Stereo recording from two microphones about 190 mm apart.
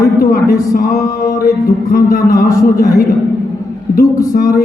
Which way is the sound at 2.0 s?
50° left (ahead or behind).